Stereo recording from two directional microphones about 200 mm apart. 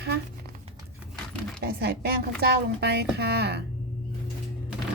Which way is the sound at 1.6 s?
50° right (ahead or behind).